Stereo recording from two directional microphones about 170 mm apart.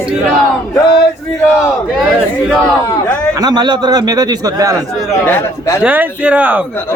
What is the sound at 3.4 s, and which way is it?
A man's voice, 25° right (ahead or behind).